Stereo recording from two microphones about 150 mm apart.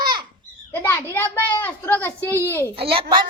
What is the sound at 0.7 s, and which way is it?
A woman's voice, 15° left (ahead or behind).